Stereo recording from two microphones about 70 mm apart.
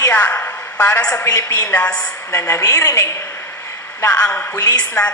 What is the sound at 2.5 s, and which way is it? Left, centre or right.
Speech, left.